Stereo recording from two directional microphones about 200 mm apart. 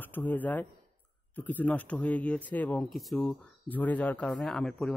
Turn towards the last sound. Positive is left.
turn(degrees=5)  # may be behind; listen again after turning